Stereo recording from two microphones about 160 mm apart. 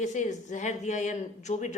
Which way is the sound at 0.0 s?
50° left (ahead or behind).